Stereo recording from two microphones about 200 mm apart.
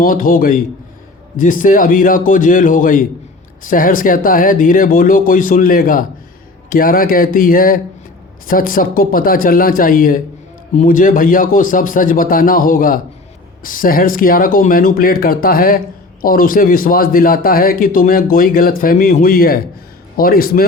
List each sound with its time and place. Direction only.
0.0 s a man's voice: 45° left (ahead or behind)